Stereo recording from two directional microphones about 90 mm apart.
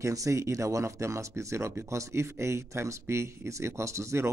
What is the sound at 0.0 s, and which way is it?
Speech, 35° right (ahead or behind).